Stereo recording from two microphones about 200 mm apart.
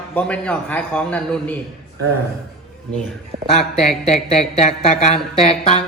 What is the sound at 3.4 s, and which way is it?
A man's voice, 30° left (ahead or behind).